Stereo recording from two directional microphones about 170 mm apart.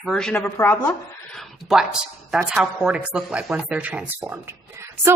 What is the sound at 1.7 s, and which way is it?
Speech, 5° right (ahead or behind).